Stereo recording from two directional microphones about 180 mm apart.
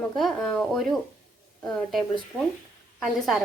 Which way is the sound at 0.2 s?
Centre (ahead or behind).